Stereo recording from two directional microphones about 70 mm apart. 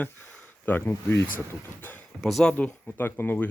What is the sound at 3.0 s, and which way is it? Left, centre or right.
Speech, left.